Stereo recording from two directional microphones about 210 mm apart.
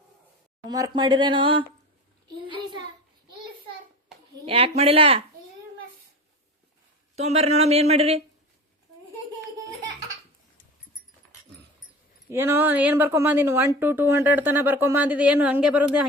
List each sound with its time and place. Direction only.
0.7 s speech: 20° right (ahead or behind)
4.4 s speech: 25° right (ahead or behind)
7.2 s speech: 30° right (ahead or behind)
12.3 s a woman's voice: 10° right (ahead or behind)